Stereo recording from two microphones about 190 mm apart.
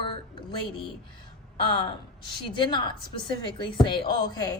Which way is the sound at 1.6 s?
25° left (ahead or behind).